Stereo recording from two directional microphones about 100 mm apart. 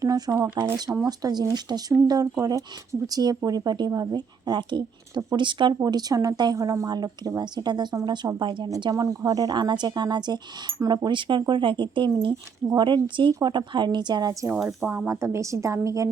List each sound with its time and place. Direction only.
0.0 s shuffling cards: 35° right (ahead or behind)
0.6 s speech: 45° right (ahead or behind)
5.8 s speech: 40° right (ahead or behind)
8.8 s speech: 40° right (ahead or behind)
14.5 s speech: 5° right (ahead or behind)
14.8 s speech: 20° right (ahead or behind)